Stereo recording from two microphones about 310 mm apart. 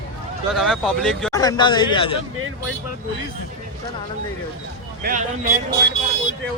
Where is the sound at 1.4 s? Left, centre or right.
Centre.